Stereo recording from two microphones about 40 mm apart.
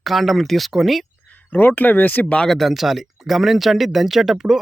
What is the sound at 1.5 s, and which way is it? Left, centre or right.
Speech, left.